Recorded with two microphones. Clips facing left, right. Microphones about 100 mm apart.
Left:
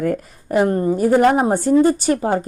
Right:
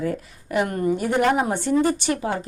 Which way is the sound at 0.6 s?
30° left (ahead or behind).